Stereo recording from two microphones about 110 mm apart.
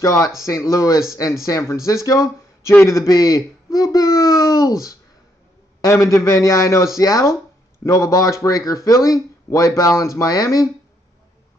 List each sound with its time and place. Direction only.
0.0 s a man's voice: 30° left (ahead or behind)